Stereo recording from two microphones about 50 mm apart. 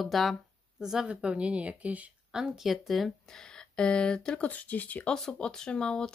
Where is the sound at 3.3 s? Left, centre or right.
Centre; by 5.1 s left.